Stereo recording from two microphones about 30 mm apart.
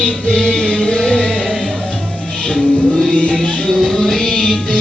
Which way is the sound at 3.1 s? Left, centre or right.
Left.